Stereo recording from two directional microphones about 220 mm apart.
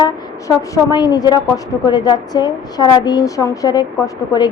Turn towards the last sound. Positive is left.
turn(degrees=15)  # may be behind; listen again after turning